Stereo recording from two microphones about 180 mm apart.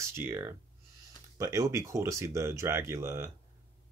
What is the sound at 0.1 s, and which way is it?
Speech, 15° right (ahead or behind).